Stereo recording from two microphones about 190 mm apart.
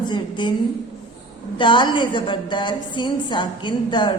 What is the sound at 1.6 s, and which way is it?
A woman's voice, 25° left (ahead or behind).